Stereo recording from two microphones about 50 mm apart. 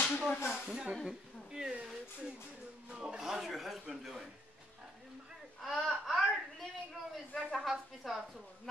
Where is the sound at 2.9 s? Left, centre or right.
Centre.